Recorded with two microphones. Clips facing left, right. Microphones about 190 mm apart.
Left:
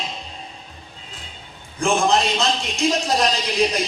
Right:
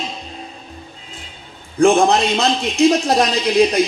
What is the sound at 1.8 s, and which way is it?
A man's voice, 60° right (ahead or behind).